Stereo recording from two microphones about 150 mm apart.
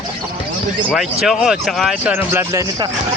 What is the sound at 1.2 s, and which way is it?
Speech, centre (ahead or behind).